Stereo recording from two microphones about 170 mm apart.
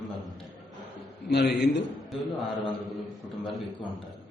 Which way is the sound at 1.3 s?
75° left (ahead or behind).